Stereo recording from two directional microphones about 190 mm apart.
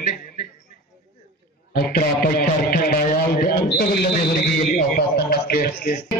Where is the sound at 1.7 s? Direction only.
50° left (ahead or behind).